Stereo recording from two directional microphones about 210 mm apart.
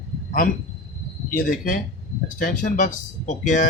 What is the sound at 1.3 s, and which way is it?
Speech, 40° left (ahead or behind).